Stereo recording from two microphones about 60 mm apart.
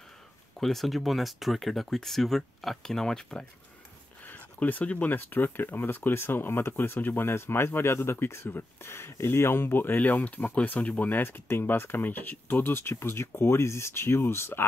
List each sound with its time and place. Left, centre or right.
0.6 s speech: centre
4.3 s speech: left